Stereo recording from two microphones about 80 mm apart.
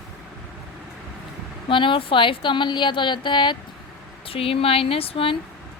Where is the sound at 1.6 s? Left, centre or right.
Left.